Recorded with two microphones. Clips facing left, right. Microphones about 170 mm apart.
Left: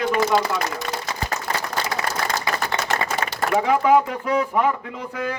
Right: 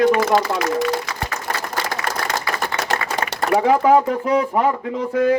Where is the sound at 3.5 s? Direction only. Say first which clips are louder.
Right 3 dB; 35° right (ahead or behind).